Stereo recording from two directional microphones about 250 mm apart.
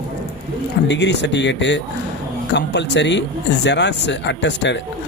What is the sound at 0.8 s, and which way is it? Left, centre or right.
A man's voice, left.